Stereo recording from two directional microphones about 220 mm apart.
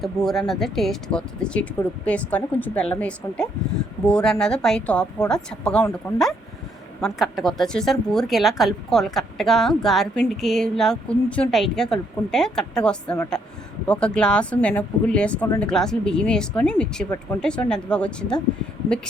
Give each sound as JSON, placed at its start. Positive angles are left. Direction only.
{"t": 0.0, "sound": "a woman's voice", "side_deg": 0}